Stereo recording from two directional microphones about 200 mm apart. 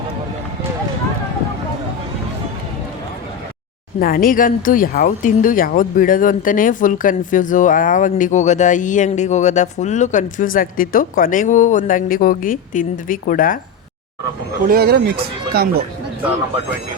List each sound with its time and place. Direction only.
4.0 s speech: 45° left (ahead or behind)
14.7 s speech: 50° right (ahead or behind)